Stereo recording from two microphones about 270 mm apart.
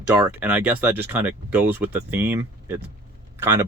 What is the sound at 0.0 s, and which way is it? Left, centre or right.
Speech, centre.